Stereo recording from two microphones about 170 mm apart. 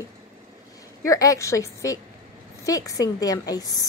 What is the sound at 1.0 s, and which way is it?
A woman's voice, 20° left (ahead or behind).